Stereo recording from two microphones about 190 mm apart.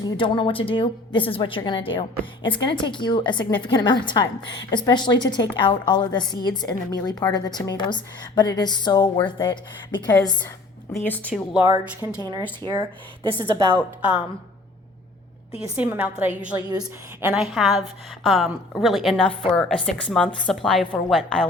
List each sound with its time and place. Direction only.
0.0 s a woman's voice: 25° left (ahead or behind); by 11.4 s 5° left (ahead or behind)
11.5 s a woman's voice: 10° right (ahead or behind)
15.7 s a woman's voice: 10° right (ahead or behind)
16.6 s a woman's voice: 20° right (ahead or behind)
17.3 s a woman's voice: centre (ahead or behind)